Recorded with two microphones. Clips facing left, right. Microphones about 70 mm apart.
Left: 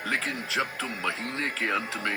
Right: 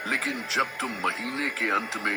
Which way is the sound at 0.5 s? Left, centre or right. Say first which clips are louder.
Right 3 dB; right.